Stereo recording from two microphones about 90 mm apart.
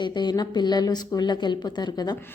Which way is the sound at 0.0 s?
55° left (ahead or behind).